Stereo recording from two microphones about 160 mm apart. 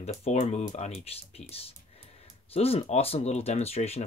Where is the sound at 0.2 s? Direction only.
45° left (ahead or behind).